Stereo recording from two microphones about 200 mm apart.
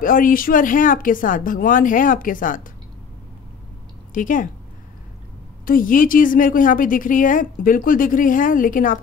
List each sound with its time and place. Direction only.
0.0 s a woman's voice: 45° left (ahead or behind)
4.1 s speech: 40° left (ahead or behind)
5.7 s a woman's voice: 45° left (ahead or behind)